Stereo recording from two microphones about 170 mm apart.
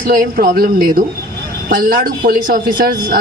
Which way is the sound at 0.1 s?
60° right (ahead or behind).